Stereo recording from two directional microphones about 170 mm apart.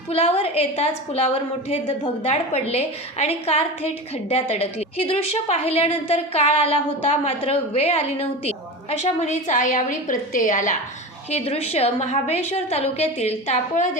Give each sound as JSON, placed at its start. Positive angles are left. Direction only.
{"t": 0.1, "sound": "a woman's voice", "side_deg": 35}
{"t": 11.3, "sound": "a woman's voice", "side_deg": 35}